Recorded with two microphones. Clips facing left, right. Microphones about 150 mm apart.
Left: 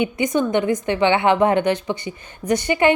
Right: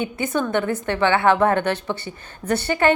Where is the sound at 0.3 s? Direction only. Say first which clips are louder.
Left 3 dB; 15° left (ahead or behind).